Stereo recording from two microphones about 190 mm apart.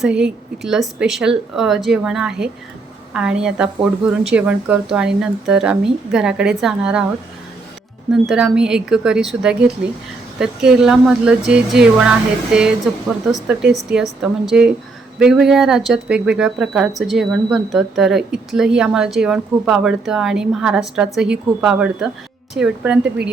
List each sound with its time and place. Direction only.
0.0 s speech: 5° right (ahead or behind)
8.1 s speech: centre (ahead or behind)
13.3 s speech: 5° right (ahead or behind)